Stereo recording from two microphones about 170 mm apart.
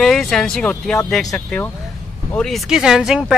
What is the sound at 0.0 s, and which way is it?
A man's voice, centre (ahead or behind).